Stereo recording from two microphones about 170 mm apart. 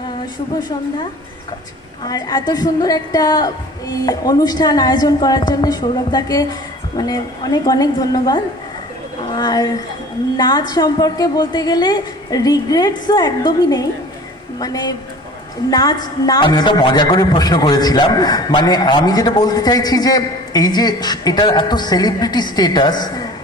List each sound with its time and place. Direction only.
0.6 s a woman's voice: 25° left (ahead or behind)
2.0 s a woman's voice: 20° left (ahead or behind)